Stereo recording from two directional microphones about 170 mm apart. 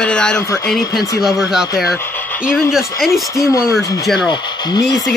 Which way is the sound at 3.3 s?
20° left (ahead or behind).